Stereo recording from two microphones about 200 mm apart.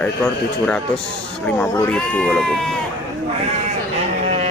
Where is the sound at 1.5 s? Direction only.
5° left (ahead or behind).